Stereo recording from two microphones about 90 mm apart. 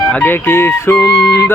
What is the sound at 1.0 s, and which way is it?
Speech, 40° left (ahead or behind).